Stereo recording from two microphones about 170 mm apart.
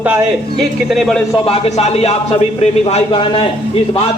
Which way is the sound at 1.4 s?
35° left (ahead or behind).